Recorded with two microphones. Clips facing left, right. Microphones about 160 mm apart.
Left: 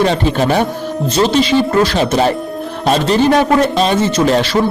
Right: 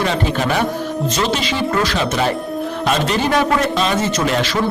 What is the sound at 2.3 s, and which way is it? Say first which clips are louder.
Music: left 2 dB; centre (ahead or behind).